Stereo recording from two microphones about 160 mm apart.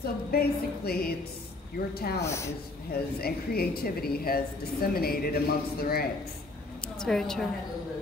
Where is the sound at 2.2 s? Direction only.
15° left (ahead or behind).